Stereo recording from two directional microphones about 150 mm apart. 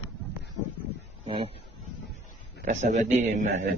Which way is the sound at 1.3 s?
40° right (ahead or behind).